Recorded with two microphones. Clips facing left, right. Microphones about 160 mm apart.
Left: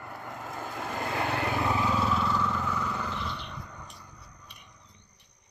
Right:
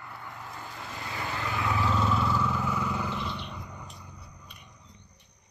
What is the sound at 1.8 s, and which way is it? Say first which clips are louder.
Vehicle: even; 5° left (ahead or behind).